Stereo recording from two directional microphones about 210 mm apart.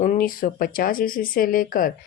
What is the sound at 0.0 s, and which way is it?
Speech, 40° left (ahead or behind).